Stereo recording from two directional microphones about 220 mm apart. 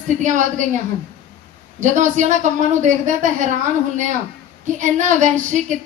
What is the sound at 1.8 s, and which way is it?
A woman's voice, 35° right (ahead or behind).